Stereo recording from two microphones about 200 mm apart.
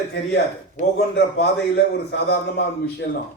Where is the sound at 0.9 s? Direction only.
55° left (ahead or behind).